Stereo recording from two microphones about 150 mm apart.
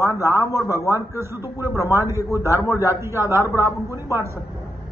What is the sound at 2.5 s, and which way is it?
Speech, 20° left (ahead or behind).